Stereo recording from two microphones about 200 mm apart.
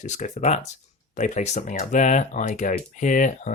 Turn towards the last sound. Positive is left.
turn(degrees=40)  # may be behind; listen again after turning